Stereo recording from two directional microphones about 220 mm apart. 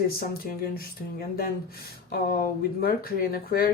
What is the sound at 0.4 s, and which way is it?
Speech, 40° left (ahead or behind).